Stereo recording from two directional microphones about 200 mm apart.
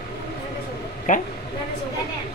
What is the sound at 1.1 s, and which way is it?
Speech, 40° left (ahead or behind).